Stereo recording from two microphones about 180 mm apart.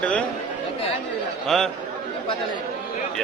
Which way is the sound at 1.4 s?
Centre (ahead or behind).